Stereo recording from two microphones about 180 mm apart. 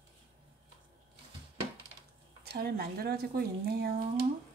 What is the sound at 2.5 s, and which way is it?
Speech, 60° right (ahead or behind).